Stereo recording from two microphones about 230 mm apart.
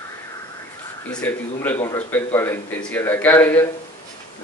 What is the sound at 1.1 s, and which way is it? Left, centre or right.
A man's voice, centre.